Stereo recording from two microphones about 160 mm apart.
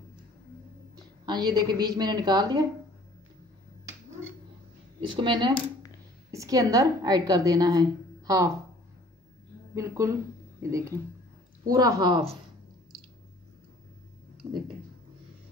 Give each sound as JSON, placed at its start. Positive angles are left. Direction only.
{"t": 1.2, "sound": "a woman's voice", "side_deg": -25}
{"t": 5.0, "sound": "a woman's voice", "side_deg": -30}
{"t": 9.8, "sound": "a woman's voice", "side_deg": -15}